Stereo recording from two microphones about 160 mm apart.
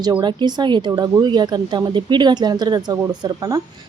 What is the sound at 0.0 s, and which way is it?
Speech, 30° right (ahead or behind).